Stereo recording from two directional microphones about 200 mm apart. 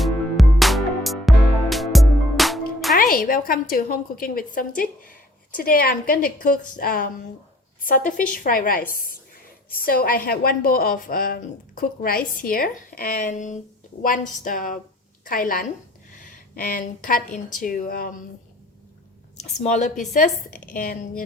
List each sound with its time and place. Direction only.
0.0 s music: centre (ahead or behind)
2.9 s a woman's voice: 45° left (ahead or behind)
19.5 s a woman's voice: 35° left (ahead or behind)